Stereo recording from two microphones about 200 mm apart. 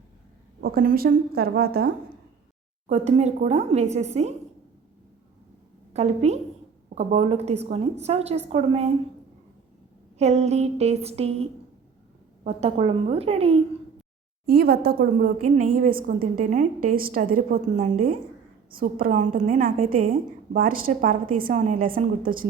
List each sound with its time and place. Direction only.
0.6 s a woman's voice: 45° right (ahead or behind)
2.8 s a woman's voice: 35° right (ahead or behind)
5.9 s a woman's voice: 35° right (ahead or behind)
10.2 s a woman's voice: 35° right (ahead or behind)
12.5 s a woman's voice: 30° right (ahead or behind)
14.4 s a woman's voice: 50° right (ahead or behind)